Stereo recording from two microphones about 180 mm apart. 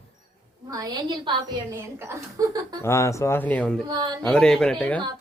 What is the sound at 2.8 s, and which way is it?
Speech, 15° left (ahead or behind).